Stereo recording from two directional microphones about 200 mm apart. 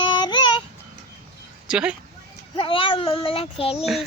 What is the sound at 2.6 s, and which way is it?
Speech, 25° left (ahead or behind).